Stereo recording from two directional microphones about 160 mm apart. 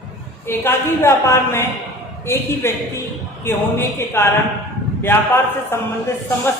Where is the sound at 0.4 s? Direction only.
15° left (ahead or behind).